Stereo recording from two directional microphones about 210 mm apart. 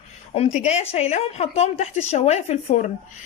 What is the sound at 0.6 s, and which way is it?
A woman's voice, 30° left (ahead or behind).